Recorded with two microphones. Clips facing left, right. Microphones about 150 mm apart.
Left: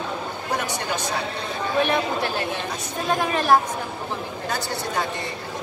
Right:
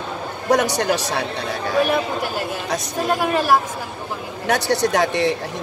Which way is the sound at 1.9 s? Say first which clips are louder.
Right 2 dB; 10° right (ahead or behind).